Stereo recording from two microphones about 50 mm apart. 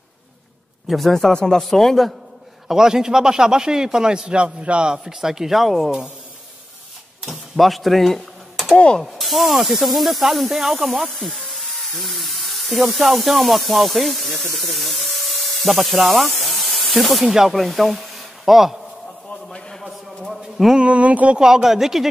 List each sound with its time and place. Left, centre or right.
0.8 s a man's voice: centre
2.7 s a man's voice: centre
7.2 s a sound: centre
8.7 s speech: left
9.0 s speech: centre
19.8 s a sound: centre
20.7 s speech: right
21.4 s a man's voice: centre